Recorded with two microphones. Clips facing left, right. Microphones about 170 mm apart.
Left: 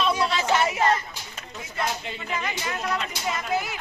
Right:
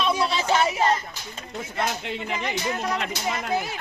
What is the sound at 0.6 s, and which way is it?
Speech, 25° right (ahead or behind).